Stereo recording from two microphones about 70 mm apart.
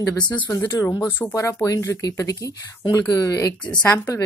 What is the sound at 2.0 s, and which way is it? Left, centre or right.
Speech, left.